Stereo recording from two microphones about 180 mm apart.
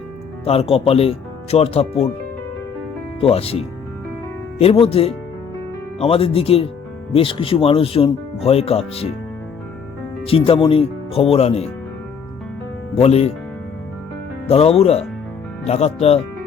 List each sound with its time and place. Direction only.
0.4 s speech: 35° left (ahead or behind)
3.2 s speech: 35° left (ahead or behind)
4.6 s speech: 30° left (ahead or behind)
10.2 s speech: 30° left (ahead or behind)
12.9 s speech: 35° left (ahead or behind)
14.4 s speech: 35° left (ahead or behind)